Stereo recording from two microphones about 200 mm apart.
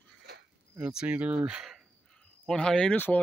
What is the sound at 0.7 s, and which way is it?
Speech, 5° right (ahead or behind).